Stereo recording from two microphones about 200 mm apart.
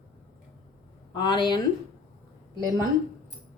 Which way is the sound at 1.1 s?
25° left (ahead or behind).